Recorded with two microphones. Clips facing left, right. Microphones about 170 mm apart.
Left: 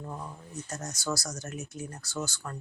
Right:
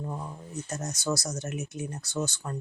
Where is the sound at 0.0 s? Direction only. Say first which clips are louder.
Right 3 dB; 15° right (ahead or behind).